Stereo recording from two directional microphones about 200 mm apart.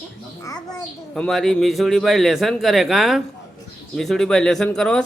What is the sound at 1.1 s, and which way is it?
A man's voice, centre (ahead or behind).